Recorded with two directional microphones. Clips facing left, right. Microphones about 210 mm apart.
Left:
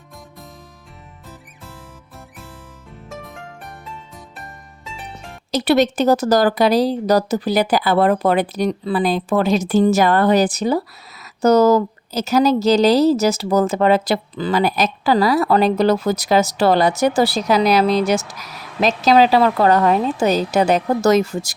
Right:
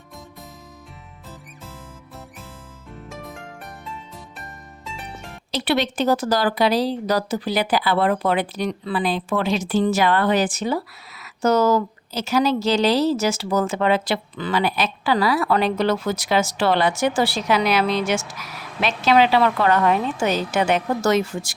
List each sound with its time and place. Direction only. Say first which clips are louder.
3.1 s music: left 2 dB; centre (ahead or behind)
5.5 s speech: left 7 dB; 45° left (ahead or behind)